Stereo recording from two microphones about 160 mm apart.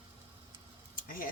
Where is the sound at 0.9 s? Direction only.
60° left (ahead or behind).